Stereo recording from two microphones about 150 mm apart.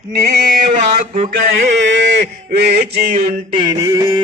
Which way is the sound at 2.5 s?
90° right.